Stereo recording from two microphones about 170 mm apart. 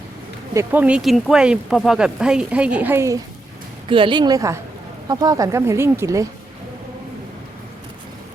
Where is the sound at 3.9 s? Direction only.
30° right (ahead or behind).